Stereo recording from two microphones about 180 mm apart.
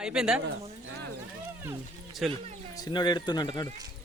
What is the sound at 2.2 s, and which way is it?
Speech, centre (ahead or behind).